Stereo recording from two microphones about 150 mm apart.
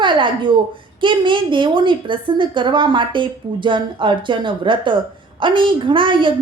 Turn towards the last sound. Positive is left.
turn(degrees=-35)  # may be behind; listen again after turning